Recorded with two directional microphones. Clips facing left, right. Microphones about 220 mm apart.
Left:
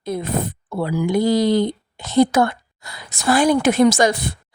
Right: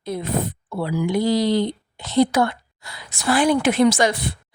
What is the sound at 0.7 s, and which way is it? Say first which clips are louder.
Speech: left 3 dB; 45° left (ahead or behind).